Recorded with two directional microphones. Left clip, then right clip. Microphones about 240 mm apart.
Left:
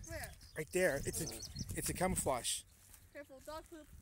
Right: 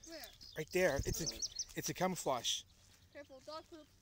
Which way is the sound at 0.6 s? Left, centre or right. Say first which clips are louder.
Even; centre.